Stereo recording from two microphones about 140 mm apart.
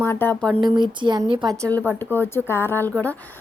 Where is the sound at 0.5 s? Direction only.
35° right (ahead or behind).